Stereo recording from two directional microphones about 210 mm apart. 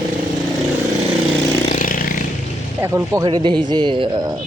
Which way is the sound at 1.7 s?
40° left (ahead or behind).